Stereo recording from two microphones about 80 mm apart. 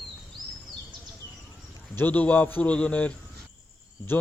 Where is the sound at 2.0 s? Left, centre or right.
Left.